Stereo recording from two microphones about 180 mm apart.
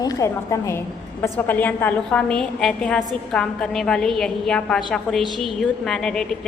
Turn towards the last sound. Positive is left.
turn(degrees=5)  # may be behind; listen again after turning